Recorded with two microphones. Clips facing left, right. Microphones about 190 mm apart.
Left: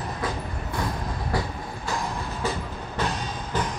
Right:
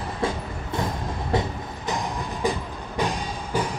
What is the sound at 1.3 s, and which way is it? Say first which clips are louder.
Train: right 4 dB; 25° right (ahead or behind).